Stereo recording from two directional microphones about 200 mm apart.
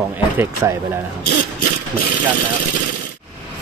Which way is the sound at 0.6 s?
15° right (ahead or behind).